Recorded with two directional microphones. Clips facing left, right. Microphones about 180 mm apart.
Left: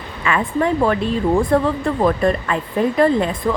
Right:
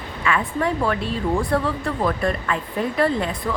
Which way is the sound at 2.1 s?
25° left (ahead or behind).